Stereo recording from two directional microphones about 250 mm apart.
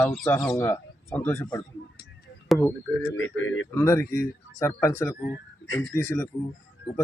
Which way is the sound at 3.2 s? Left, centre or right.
Left.